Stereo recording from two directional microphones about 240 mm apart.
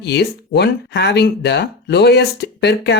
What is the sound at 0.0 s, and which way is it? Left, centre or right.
Speech, left.